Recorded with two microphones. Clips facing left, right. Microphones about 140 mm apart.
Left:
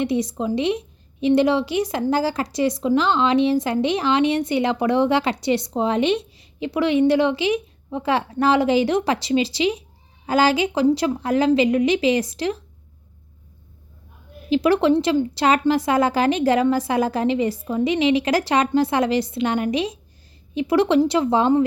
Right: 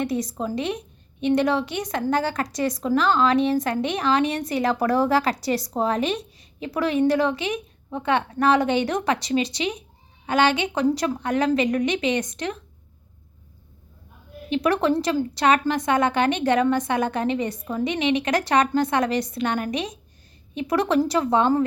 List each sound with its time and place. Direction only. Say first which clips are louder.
0.0 s a woman's voice: left 4 dB; 25° left (ahead or behind)
14.5 s a woman's voice: left 4 dB; 30° left (ahead or behind)